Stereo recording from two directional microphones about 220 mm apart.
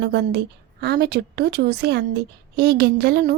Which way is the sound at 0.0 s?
50° right (ahead or behind).